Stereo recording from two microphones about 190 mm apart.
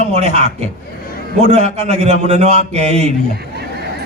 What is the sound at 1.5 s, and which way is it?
A man's voice, 35° right (ahead or behind).